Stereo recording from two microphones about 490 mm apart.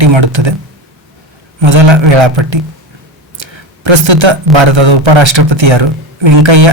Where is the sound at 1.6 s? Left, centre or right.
Right.